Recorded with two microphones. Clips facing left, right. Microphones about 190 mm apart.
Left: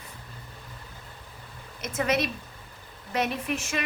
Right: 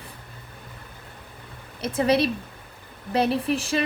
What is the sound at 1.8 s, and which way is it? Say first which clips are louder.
A woman's voice: right 6 dB; 30° right (ahead or behind).